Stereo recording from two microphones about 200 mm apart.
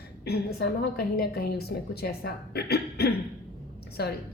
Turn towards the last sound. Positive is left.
turn(degrees=55)  # may be behind; listen again after turning